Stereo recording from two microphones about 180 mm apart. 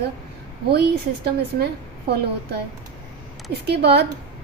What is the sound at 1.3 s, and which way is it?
Speech, 65° right (ahead or behind).